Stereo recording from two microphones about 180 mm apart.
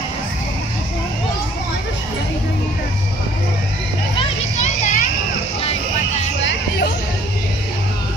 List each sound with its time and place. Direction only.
4.2 s children playing: 40° left (ahead or behind)